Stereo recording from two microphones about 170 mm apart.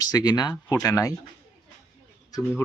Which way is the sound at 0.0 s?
20° left (ahead or behind).